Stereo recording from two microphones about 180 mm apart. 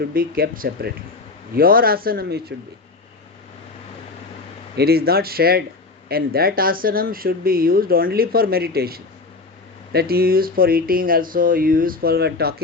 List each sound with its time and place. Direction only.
0.1 s speech: 55° right (ahead or behind)
4.8 s speech: 60° right (ahead or behind)